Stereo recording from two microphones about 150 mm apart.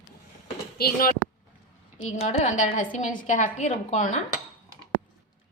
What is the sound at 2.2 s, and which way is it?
A woman's voice, 50° left (ahead or behind).